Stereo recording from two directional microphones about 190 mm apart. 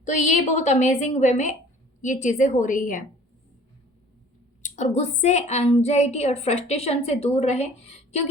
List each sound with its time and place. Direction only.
0.0 s a woman's voice: 40° left (ahead or behind)
4.6 s a woman's voice: 40° left (ahead or behind)